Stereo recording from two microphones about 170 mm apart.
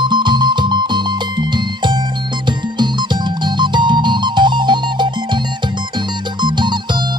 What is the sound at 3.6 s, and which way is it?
Music, 25° right (ahead or behind).